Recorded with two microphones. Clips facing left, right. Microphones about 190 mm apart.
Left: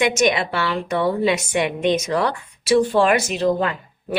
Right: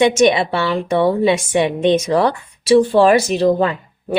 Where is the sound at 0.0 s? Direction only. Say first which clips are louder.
Right 6 dB; 30° right (ahead or behind).